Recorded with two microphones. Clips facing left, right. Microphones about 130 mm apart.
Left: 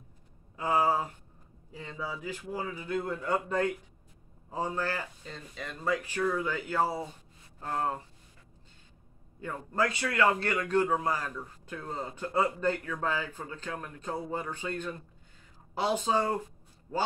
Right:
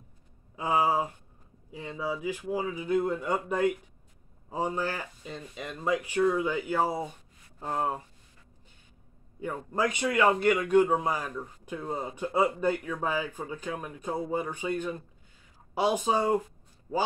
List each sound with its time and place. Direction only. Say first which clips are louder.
0.6 s a man's voice: right 1 dB; 15° right (ahead or behind)
9.4 s a man's voice: right 1 dB; 15° right (ahead or behind)